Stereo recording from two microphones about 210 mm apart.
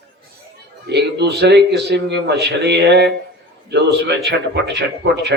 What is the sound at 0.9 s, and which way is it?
A man's voice, 55° right (ahead or behind).